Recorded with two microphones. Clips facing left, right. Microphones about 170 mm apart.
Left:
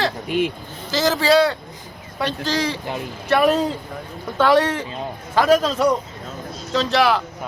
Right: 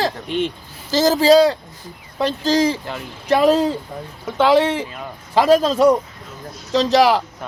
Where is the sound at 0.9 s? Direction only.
40° right (ahead or behind).